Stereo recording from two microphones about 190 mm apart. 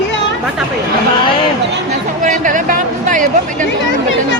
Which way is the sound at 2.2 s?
40° right (ahead or behind).